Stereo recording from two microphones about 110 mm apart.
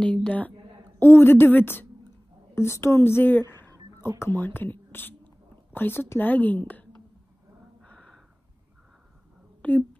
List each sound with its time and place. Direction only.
0.0 s a woman's voice: 10° left (ahead or behind)
7.8 s gasp: 10° left (ahead or behind)
9.6 s a sound: 15° left (ahead or behind)